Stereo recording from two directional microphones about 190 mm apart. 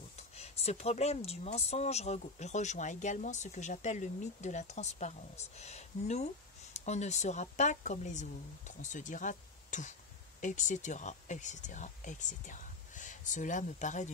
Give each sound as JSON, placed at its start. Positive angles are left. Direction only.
{"t": 0.4, "sound": "speech", "side_deg": 35}